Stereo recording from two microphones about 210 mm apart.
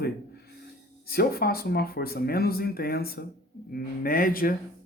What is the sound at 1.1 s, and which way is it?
Speech, 45° left (ahead or behind).